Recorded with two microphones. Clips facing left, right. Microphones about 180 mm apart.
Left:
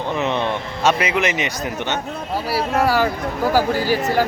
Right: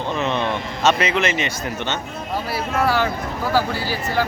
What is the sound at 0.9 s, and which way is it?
Speech, 10° left (ahead or behind).